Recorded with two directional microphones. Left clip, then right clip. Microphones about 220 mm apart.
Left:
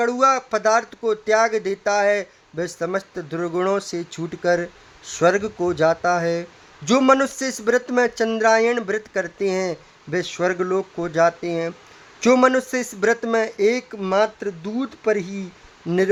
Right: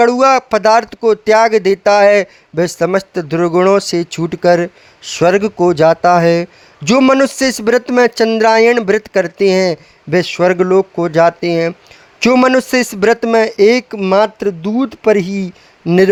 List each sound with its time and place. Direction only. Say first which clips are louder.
0.0 s speech: right 9 dB; 35° right (ahead or behind)